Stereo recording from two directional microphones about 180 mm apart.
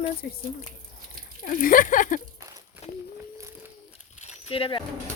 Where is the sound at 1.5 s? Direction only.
50° left (ahead or behind).